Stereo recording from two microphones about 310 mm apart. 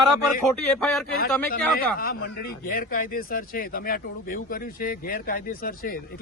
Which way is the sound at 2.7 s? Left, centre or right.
Left.